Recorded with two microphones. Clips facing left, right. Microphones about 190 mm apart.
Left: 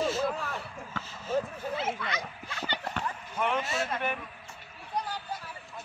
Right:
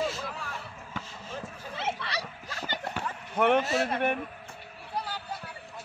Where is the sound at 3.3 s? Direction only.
65° right (ahead or behind).